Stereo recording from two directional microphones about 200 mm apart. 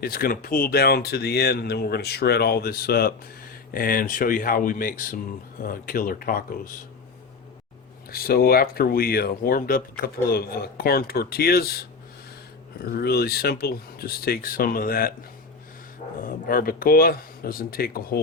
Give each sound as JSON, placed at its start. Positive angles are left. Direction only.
{"t": 0.0, "sound": "speech", "side_deg": 50}
{"t": 8.1, "sound": "speech", "side_deg": 50}
{"t": 16.2, "sound": "speech", "side_deg": 45}